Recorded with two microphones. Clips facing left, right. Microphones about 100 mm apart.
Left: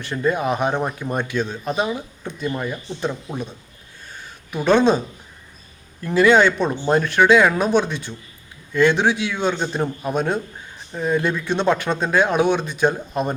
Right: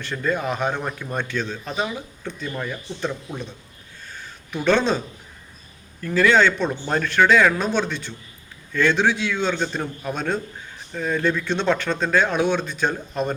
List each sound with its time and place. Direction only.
0.0 s speech: 20° left (ahead or behind)
4.1 s a sound: 15° left (ahead or behind)
6.0 s speech: 20° left (ahead or behind)